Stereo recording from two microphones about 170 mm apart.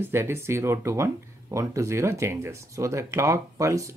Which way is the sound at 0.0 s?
15° right (ahead or behind).